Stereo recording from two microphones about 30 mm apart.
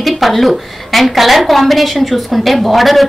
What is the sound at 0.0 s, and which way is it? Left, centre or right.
A woman's voice, centre.